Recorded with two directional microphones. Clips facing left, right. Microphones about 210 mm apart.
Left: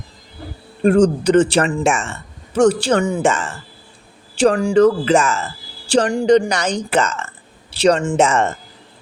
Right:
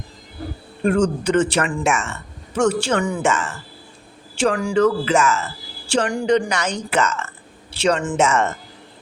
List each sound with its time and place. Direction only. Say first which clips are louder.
0.8 s speech: left 5 dB; 35° left (ahead or behind)